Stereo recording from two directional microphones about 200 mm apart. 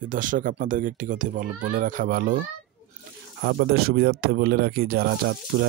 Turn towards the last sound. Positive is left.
turn(degrees=-50)  # may be behind; listen again after turning